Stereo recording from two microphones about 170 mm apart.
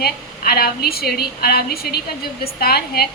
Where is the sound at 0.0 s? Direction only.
65° left (ahead or behind).